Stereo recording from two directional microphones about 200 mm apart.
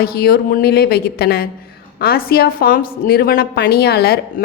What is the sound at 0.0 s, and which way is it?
A woman's voice, 50° left (ahead or behind).